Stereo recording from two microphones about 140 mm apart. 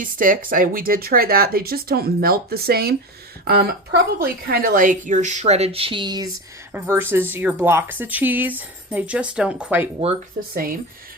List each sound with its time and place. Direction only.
0.0 s speech: 75° right (ahead or behind); by 6.3 s 30° right (ahead or behind)
6.7 s speech: 15° right (ahead or behind)
10.5 s speech: 90° right